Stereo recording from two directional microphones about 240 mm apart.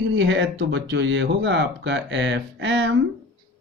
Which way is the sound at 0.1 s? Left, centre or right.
Right.